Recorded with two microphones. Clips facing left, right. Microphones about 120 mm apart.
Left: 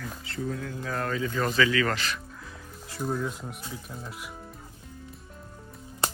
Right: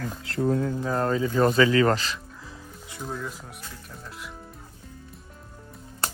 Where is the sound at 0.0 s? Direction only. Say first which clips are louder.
Right 7 dB; 50° right (ahead or behind).